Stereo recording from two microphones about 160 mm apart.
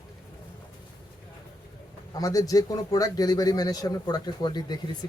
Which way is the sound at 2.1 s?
20° left (ahead or behind).